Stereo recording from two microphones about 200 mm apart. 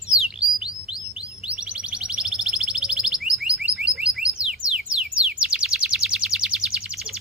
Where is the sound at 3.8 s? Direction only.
5° right (ahead or behind).